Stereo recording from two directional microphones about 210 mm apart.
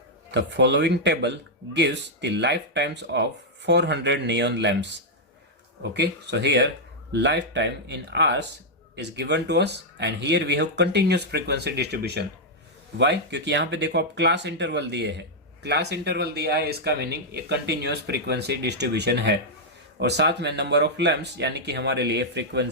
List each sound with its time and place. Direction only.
0.3 s speech: 55° right (ahead or behind)